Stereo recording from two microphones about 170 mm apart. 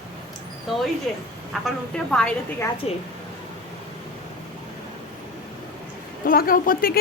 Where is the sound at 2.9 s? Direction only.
35° left (ahead or behind).